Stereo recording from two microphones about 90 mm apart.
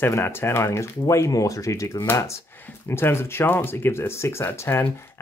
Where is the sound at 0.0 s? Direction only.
25° left (ahead or behind).